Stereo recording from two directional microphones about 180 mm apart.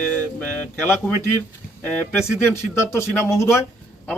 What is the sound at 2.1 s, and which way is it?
Speech, 5° right (ahead or behind).